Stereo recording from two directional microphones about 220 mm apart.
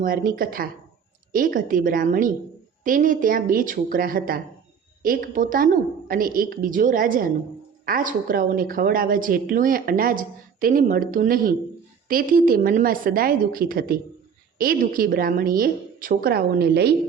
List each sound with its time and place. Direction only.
0.0 s a woman's voice: 40° right (ahead or behind)